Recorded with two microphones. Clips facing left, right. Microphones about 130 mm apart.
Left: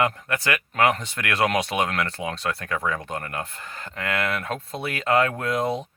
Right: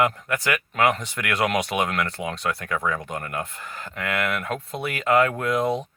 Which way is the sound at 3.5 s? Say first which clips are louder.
Right 1 dB; 30° left (ahead or behind).